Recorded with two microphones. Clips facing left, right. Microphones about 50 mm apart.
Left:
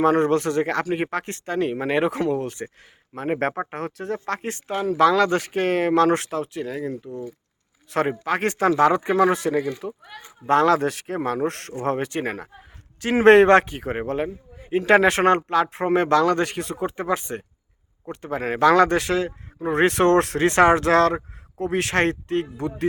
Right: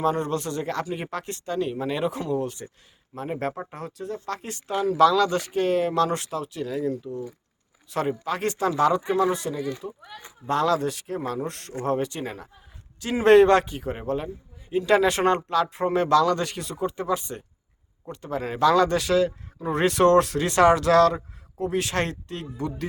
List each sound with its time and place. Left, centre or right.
0.0 s speech: left
6.1 s speech: left
6.3 s speech: left
7.9 s speech: left
9.8 s speech: left
10.4 s speech: left
11.8 s speech: left